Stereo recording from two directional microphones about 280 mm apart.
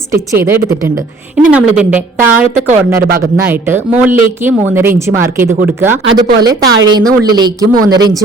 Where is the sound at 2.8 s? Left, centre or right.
Right.